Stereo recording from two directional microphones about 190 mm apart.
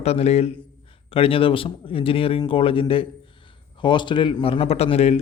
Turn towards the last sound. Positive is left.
turn(degrees=35)  # may be behind; listen again after turning